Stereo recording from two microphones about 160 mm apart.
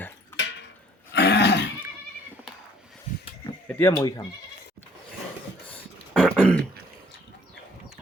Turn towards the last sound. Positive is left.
turn(degrees=5)  # may be behind; listen again after turning